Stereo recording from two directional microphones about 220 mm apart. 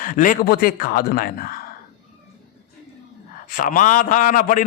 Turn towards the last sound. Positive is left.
turn(degrees=35)  # may be behind; listen again after turning